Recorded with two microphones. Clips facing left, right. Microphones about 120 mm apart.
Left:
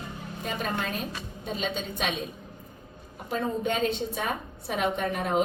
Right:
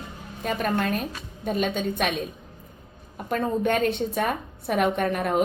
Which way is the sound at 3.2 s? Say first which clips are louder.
Right 4 dB; 55° right (ahead or behind).